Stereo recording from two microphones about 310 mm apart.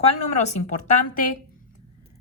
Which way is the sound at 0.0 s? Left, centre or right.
Left.